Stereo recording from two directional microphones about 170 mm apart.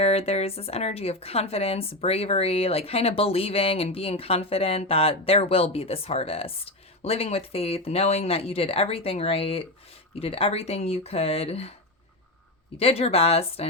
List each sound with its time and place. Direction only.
0.0 s a woman's voice: 40° left (ahead or behind)
12.7 s a woman's voice: 35° left (ahead or behind)